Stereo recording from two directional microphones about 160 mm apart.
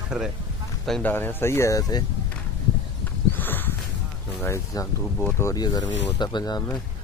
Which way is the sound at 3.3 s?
10° left (ahead or behind).